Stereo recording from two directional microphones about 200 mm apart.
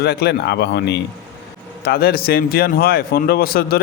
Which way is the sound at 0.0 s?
55° left (ahead or behind).